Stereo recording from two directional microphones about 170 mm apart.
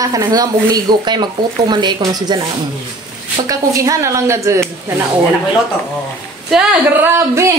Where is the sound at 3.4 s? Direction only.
20° right (ahead or behind).